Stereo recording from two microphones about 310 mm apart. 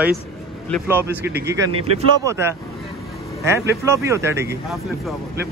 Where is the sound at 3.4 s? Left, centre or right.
Centre.